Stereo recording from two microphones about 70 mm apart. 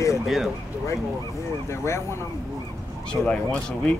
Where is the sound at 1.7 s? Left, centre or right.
Left.